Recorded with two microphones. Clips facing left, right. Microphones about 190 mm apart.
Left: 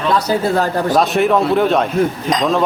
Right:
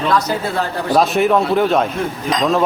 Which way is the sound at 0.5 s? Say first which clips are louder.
Left 4 dB; 40° left (ahead or behind).